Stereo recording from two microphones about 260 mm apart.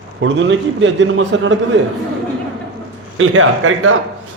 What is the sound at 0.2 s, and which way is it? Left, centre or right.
A man's voice, right.